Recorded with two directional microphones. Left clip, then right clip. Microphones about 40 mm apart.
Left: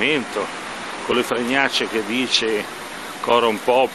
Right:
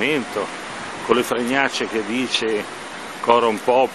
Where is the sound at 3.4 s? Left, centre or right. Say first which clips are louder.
Even; right.